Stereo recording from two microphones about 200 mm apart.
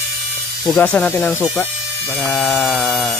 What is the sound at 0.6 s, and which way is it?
Speech, 5° left (ahead or behind).